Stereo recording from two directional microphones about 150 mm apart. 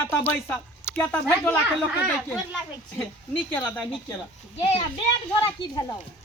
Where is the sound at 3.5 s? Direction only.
5° left (ahead or behind).